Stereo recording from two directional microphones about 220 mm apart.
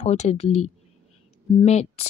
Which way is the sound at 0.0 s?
30° left (ahead or behind).